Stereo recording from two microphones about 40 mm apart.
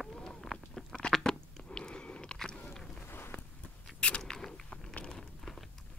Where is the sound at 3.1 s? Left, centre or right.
Left.